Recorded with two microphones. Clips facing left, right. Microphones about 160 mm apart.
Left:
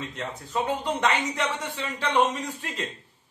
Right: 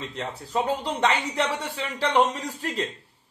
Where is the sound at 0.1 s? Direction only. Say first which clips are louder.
Right 2 dB; 35° right (ahead or behind).